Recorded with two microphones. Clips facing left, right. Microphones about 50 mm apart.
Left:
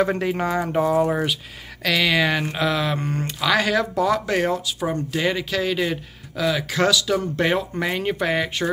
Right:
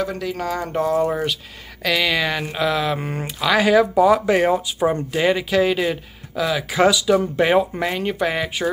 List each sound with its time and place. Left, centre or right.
0.0 s speech: left
0.6 s speech: centre
1.8 s speech: centre
7.9 s speech: centre